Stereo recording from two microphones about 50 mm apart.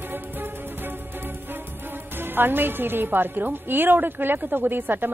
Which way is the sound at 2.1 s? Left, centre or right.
Right.